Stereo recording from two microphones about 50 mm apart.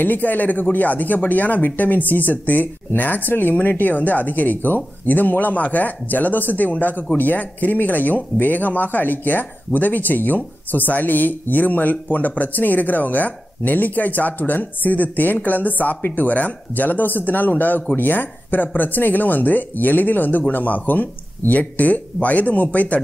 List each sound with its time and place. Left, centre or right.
0.0 s speech: left